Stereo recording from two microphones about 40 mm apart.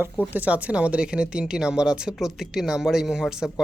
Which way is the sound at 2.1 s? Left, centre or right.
Centre.